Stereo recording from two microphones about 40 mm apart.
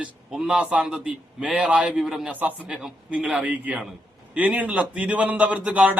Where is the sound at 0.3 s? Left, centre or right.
Centre.